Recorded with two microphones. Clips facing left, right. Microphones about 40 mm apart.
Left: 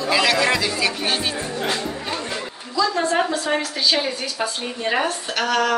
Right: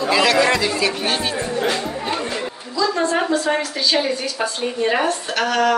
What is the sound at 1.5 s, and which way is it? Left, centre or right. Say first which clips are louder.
Music: right 3 dB; centre.